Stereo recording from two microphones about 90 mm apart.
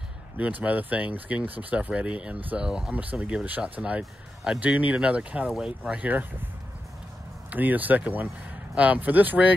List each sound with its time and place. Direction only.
0.4 s speech: 20° right (ahead or behind)
7.5 s speech: 20° right (ahead or behind)